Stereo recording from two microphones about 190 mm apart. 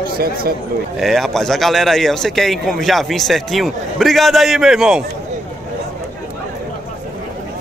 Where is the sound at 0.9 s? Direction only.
Centre (ahead or behind).